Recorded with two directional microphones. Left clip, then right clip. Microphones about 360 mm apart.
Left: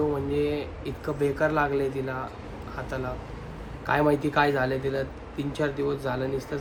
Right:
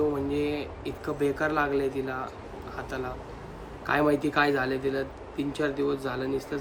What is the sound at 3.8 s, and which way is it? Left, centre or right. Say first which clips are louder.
Speech: left 1 dB; centre.